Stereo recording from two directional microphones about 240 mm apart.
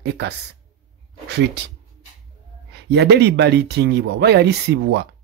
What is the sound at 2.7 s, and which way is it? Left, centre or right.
A man's voice, right.